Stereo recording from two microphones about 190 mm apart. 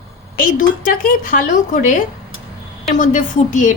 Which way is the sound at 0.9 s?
45° left (ahead or behind).